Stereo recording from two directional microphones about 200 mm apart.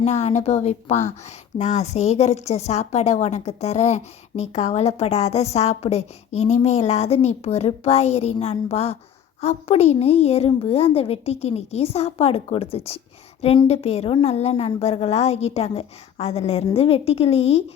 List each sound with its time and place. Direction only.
0.0 s a woman's voice: 35° left (ahead or behind)